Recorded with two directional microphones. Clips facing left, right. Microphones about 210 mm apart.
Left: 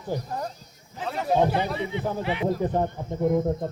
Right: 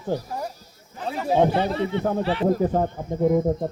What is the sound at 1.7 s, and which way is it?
Speech, 15° left (ahead or behind).